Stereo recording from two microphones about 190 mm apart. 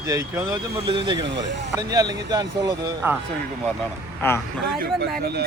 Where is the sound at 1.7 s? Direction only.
20° right (ahead or behind).